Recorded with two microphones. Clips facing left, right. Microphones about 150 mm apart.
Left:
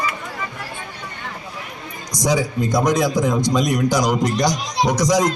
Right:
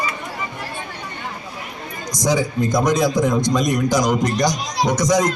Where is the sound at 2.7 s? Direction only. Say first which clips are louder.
Even; 15° left (ahead or behind).